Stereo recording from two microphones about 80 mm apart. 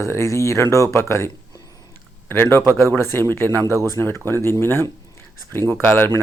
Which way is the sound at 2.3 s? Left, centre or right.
Left.